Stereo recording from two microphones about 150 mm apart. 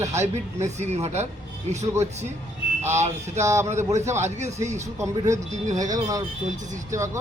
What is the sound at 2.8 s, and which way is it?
Speech, 50° right (ahead or behind).